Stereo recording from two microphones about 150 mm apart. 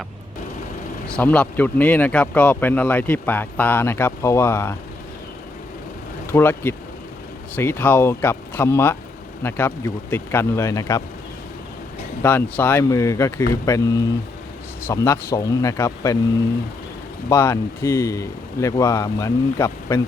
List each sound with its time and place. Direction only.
1.0 s speech: 10° left (ahead or behind)
6.3 s speech: 15° left (ahead or behind)
12.2 s speech: 15° left (ahead or behind)
17.2 s speech: 20° left (ahead or behind)